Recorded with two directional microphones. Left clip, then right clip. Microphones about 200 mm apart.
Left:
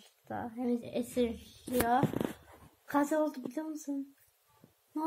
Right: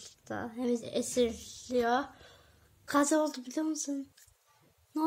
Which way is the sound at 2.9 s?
20° right (ahead or behind).